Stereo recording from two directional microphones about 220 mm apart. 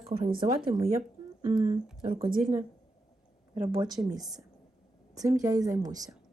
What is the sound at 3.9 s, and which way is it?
Speech, 15° right (ahead or behind).